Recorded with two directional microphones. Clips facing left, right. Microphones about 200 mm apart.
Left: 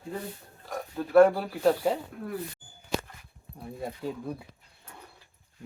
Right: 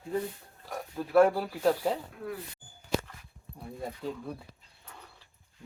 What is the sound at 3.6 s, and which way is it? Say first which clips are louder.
Speech: left 2 dB; 5° left (ahead or behind).